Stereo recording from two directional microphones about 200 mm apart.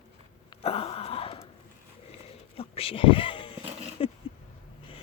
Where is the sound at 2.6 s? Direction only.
30° left (ahead or behind).